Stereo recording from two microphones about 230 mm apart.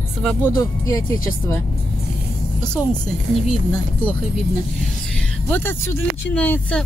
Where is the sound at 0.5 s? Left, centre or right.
Centre.